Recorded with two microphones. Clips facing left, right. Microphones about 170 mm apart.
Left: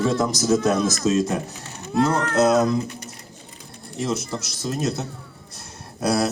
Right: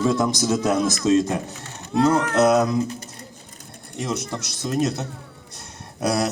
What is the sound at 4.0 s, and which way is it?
Speech, 25° left (ahead or behind).